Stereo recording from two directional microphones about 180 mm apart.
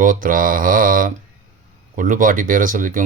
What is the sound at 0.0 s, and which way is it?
Speech, 50° right (ahead or behind).